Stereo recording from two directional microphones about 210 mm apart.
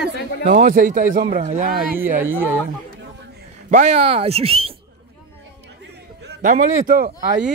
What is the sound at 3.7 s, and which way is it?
Speech, 35° right (ahead or behind).